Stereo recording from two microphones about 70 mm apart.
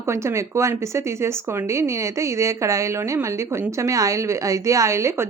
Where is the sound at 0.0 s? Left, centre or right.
Right.